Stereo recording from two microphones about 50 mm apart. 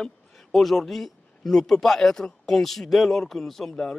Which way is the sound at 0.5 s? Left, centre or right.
Centre.